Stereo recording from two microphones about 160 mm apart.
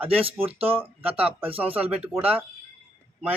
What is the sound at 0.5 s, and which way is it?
Speech, 10° right (ahead or behind).